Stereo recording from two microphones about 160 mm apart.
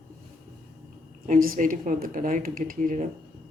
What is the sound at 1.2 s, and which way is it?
Speech, 60° right (ahead or behind).